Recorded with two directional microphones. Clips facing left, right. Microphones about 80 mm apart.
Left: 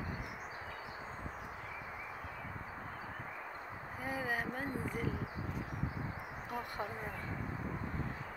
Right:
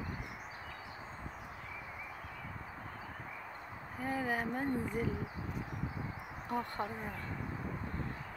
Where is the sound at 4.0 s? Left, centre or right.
Centre.